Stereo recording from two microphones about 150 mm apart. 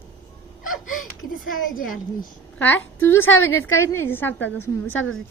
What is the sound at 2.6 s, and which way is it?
A woman's voice, 10° left (ahead or behind).